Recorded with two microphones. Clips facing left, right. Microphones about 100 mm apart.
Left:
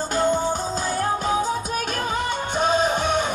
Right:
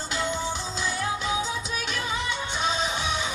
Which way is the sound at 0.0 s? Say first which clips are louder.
Left 8 dB; 45° left (ahead or behind).